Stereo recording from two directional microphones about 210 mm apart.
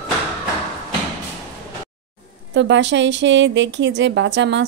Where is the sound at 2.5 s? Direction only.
60° right (ahead or behind).